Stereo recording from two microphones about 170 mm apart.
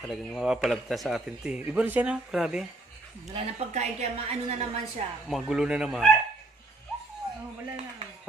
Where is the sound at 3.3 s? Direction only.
40° right (ahead or behind).